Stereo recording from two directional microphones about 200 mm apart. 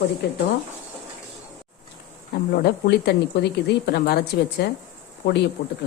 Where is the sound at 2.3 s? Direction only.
50° left (ahead or behind).